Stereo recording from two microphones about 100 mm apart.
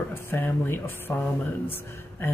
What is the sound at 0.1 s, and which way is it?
Speech, 20° left (ahead or behind).